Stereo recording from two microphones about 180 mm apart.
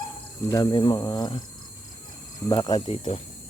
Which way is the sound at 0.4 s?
20° left (ahead or behind).